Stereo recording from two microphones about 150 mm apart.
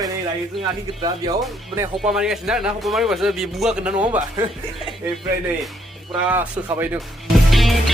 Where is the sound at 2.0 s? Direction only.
5° right (ahead or behind).